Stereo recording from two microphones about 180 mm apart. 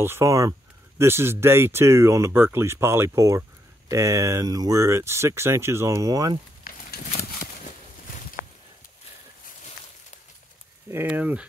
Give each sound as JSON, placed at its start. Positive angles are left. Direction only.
{"t": 0.0, "sound": "speech", "side_deg": -15}
{"t": 6.7, "sound": "a sound", "side_deg": 55}
{"t": 10.9, "sound": "speech", "side_deg": -10}